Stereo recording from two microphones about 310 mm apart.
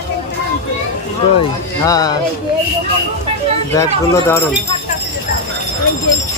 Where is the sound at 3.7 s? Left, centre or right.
Centre.